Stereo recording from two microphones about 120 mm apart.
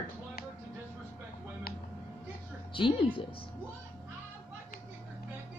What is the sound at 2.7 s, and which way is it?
Speech, 45° left (ahead or behind).